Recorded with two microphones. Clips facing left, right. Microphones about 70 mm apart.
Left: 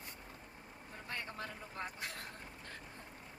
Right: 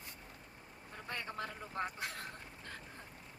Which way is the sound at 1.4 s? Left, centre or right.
Right.